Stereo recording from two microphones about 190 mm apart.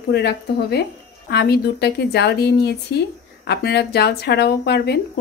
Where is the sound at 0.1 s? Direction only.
60° left (ahead or behind).